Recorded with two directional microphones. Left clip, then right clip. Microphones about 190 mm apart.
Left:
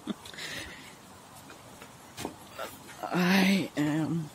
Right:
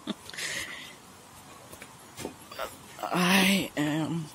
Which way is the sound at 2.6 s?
5° left (ahead or behind).